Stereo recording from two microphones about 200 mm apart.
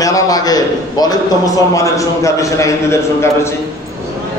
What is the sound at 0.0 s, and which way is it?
A man's voice, 15° left (ahead or behind).